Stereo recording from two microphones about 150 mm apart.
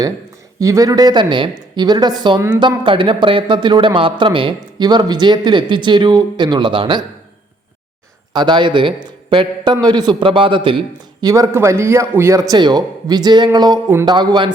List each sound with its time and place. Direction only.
0.6 s a man's voice: 20° right (ahead or behind)
8.3 s a man's voice: 30° right (ahead or behind)